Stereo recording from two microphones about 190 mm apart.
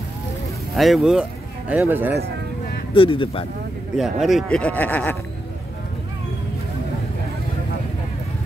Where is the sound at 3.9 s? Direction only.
Centre (ahead or behind).